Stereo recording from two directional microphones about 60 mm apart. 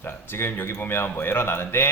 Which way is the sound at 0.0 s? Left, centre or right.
Left.